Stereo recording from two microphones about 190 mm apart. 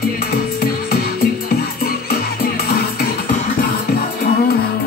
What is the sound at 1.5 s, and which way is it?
Music, 55° left (ahead or behind).